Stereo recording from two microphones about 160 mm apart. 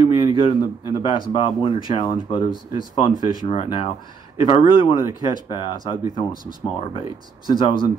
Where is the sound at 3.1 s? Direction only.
25° right (ahead or behind).